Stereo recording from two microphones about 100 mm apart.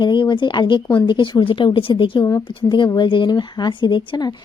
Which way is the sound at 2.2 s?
35° left (ahead or behind).